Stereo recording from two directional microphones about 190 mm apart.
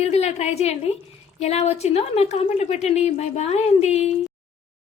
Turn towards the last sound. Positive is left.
turn(degrees=35)  # may be behind; listen again after turning